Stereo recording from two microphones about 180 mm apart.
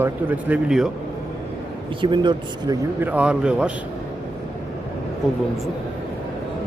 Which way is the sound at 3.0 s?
10° right (ahead or behind).